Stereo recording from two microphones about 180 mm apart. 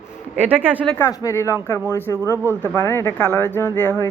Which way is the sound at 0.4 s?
10° right (ahead or behind).